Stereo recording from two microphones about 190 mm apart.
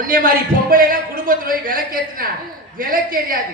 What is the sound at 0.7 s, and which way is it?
A woman's voice, 50° right (ahead or behind).